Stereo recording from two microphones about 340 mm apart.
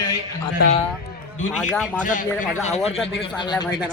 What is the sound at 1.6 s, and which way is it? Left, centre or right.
Speech, centre.